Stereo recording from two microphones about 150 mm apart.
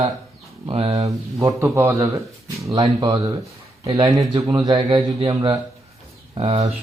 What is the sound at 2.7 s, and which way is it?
A man's voice, 30° right (ahead or behind).